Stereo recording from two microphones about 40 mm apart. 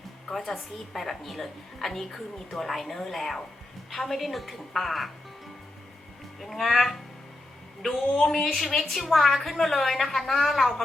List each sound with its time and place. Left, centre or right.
0.3 s a woman's voice: centre
6.4 s a woman's voice: centre
8.1 s a woman's voice: centre